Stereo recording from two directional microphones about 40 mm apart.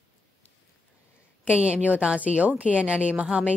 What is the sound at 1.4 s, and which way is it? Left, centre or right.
A woman's voice, right.